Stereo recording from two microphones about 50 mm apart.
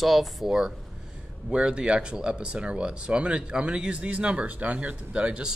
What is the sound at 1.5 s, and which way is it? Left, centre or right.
Speech, right.